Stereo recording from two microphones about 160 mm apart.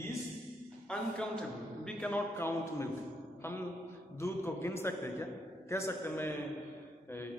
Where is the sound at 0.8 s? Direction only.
5° left (ahead or behind).